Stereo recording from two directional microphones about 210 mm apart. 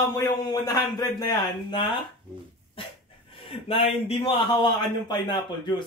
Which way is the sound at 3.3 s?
25° left (ahead or behind).